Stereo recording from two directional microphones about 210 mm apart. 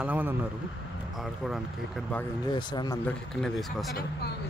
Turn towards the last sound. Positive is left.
turn(degrees=0)  # may be behind; listen again after turning